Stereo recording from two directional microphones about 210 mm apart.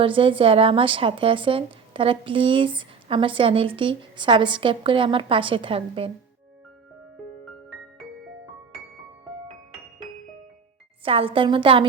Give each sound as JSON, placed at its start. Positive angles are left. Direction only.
{"t": 0.0, "sound": "speech", "side_deg": -25}
{"t": 11.0, "sound": "speech", "side_deg": -25}